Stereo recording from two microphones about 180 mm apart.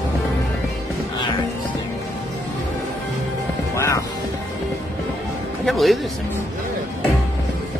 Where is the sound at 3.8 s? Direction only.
15° left (ahead or behind).